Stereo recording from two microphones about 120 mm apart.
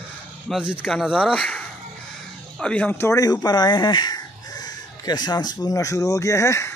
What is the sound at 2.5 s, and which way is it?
Speech, 10° left (ahead or behind).